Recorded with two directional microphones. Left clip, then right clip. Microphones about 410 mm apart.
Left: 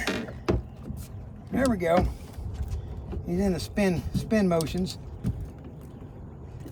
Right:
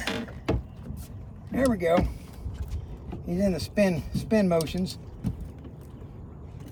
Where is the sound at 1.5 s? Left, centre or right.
Centre.